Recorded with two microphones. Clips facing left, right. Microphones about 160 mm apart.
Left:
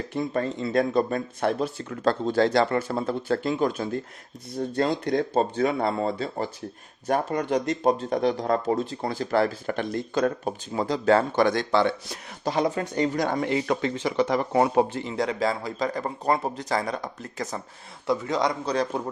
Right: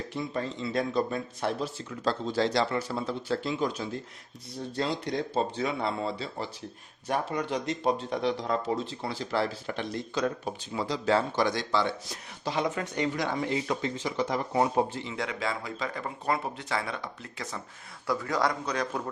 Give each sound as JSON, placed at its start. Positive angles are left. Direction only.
{"t": 0.1, "sound": "speech", "side_deg": 50}
{"t": 12.5, "sound": "speech", "side_deg": 35}
{"t": 13.5, "sound": "speech", "side_deg": 65}
{"t": 15.0, "sound": "speech", "side_deg": 35}
{"t": 18.0, "sound": "a man's voice", "side_deg": 20}
{"t": 18.6, "sound": "speech", "side_deg": 30}